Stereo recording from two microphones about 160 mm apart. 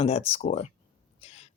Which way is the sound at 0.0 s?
40° left (ahead or behind).